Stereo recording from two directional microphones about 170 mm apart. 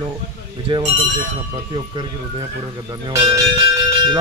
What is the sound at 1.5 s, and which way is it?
Speech, 25° right (ahead or behind).